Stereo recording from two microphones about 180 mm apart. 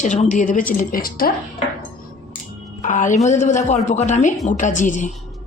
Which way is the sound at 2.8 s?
45° left (ahead or behind).